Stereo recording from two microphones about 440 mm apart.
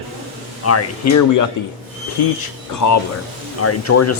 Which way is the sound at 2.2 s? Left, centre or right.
Left.